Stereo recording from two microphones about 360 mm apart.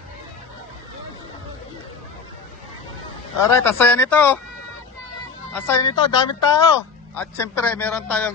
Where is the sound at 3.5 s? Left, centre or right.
Centre.